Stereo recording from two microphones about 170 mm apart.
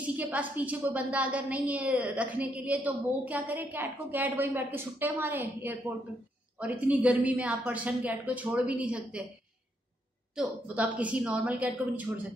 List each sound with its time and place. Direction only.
0.0 s a woman's voice: 10° right (ahead or behind)
10.3 s a woman's voice: 5° right (ahead or behind)